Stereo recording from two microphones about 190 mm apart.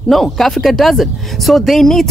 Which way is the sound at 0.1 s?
Centre (ahead or behind).